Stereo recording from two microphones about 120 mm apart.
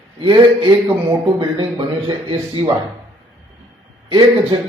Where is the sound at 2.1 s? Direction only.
45° right (ahead or behind).